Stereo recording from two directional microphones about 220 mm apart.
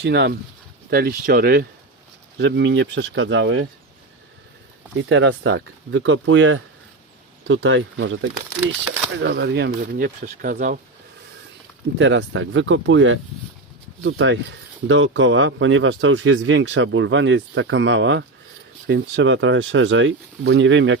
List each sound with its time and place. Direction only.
0.0 s speech: 50° right (ahead or behind)
2.4 s speech: 55° right (ahead or behind)
4.9 s speech: 55° right (ahead or behind); by 10.8 s 40° right (ahead or behind)
11.9 s speech: 55° right (ahead or behind)